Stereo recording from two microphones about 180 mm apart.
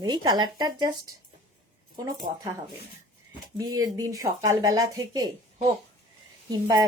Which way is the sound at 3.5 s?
20° right (ahead or behind).